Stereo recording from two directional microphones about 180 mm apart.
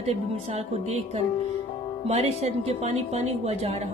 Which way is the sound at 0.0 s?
35° right (ahead or behind).